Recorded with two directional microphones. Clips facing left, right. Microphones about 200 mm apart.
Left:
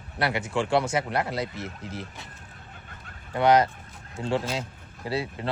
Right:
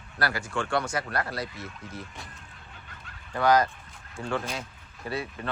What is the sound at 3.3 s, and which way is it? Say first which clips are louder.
Speech: left 2 dB; 25° left (ahead or behind).